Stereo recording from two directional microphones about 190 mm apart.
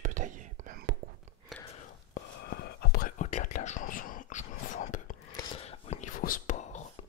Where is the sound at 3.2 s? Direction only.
40° left (ahead or behind).